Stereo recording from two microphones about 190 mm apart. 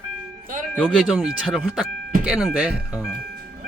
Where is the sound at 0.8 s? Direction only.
5° right (ahead or behind).